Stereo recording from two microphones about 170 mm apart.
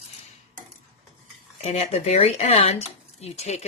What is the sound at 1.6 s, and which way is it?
A woman's voice, 35° left (ahead or behind).